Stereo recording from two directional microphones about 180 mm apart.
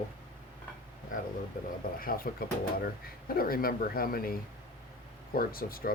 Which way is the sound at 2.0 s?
55° left (ahead or behind).